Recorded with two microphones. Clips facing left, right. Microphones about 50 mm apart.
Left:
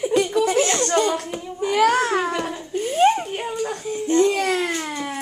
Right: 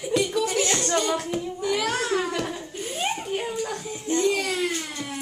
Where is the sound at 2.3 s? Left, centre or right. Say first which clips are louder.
Left 3 dB; centre.